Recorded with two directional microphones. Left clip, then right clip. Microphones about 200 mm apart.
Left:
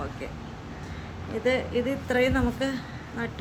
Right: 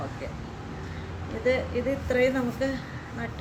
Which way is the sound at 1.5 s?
50° left (ahead or behind).